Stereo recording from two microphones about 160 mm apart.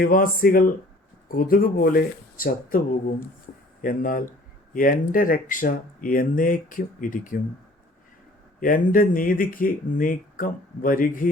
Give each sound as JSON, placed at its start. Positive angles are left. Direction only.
{"t": 0.0, "sound": "speech", "side_deg": 65}
{"t": 8.6, "sound": "speech", "side_deg": 60}